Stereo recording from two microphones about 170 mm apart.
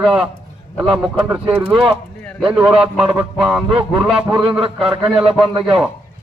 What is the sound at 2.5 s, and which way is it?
Speech, 5° right (ahead or behind).